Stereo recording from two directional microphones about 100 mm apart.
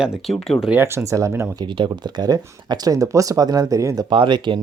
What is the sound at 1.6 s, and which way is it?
Speech, 55° right (ahead or behind).